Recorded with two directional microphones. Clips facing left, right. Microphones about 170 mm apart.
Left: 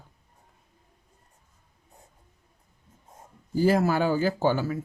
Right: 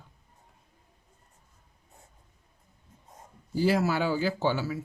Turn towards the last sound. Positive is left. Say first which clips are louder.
# left 3 dB
turn(degrees=50)  # may be behind; listen again after turning